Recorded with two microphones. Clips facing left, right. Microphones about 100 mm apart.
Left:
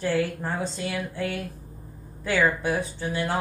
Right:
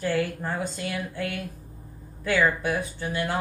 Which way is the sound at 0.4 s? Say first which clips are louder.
Left 1 dB; 25° left (ahead or behind).